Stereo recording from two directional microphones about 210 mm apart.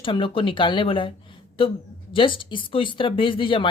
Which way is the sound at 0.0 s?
25° left (ahead or behind).